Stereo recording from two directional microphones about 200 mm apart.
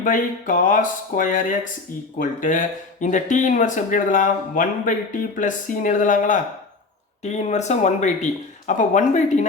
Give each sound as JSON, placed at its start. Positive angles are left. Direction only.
{"t": 0.0, "sound": "speech", "side_deg": 40}